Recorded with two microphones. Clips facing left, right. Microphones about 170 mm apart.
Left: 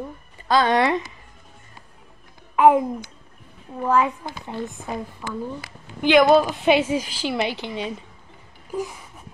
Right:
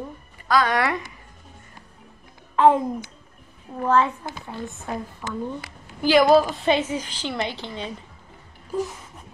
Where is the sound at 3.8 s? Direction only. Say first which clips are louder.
Even; 10° left (ahead or behind).